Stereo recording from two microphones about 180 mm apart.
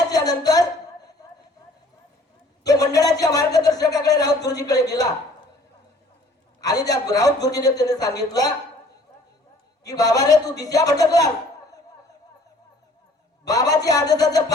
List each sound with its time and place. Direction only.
0.1 s a sound: 20° left (ahead or behind)
2.6 s a man's voice: 20° left (ahead or behind)
6.6 s a man's voice: 20° left (ahead or behind)
9.8 s a man's voice: 20° left (ahead or behind)
13.5 s a man's voice: 20° left (ahead or behind)